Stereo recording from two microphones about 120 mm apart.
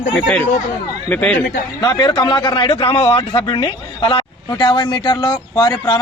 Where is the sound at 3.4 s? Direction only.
45° left (ahead or behind).